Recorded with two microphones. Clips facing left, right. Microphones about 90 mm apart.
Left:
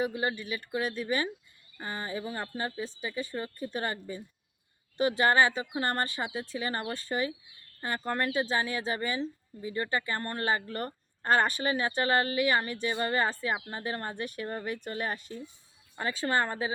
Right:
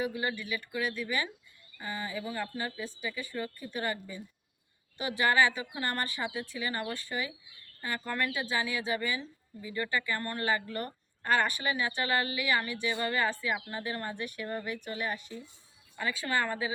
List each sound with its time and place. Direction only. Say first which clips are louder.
0.0 s speech: left 2 dB; 30° left (ahead or behind)